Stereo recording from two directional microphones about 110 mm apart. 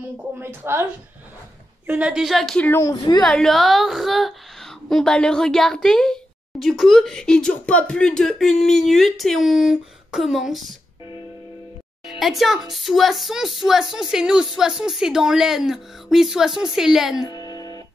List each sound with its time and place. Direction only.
0.4 s a woman's voice: 20° right (ahead or behind)
1.9 s a woman's voice: 10° right (ahead or behind)
2.8 s a woman's voice: 35° left (ahead or behind)
3.2 s a woman's voice: 5° left (ahead or behind)
12.1 s a woman's voice: centre (ahead or behind)
17.3 s music: 40° left (ahead or behind)